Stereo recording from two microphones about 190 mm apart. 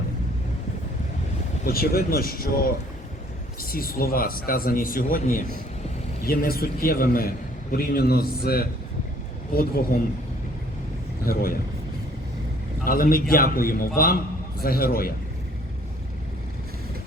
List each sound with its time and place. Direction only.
1.6 s speech: 50° left (ahead or behind)
11.3 s speech: 50° left (ahead or behind)
12.8 s speech: 50° left (ahead or behind)